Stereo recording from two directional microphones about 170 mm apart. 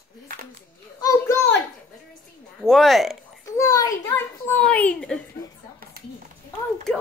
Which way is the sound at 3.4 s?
20° left (ahead or behind).